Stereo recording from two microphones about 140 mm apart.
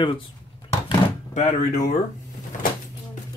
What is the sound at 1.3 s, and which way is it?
Speech, 55° left (ahead or behind).